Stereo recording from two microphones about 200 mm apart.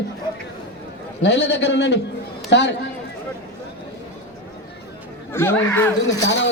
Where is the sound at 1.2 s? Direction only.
60° left (ahead or behind).